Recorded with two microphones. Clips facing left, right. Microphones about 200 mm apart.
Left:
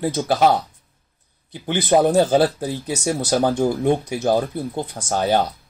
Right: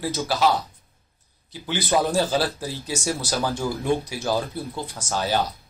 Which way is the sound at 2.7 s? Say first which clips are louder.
Left 5 dB; 60° left (ahead or behind).